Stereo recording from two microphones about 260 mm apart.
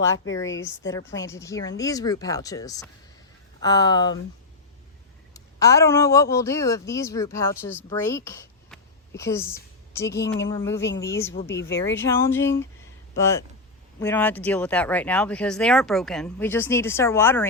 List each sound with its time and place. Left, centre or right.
0.5 s speech: left
0.9 s speech: centre
5.3 s speech: centre
11.4 s speech: left
11.9 s speech: centre